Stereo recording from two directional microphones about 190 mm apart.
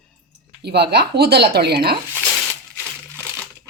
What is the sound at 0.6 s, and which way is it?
Speech, 60° right (ahead or behind).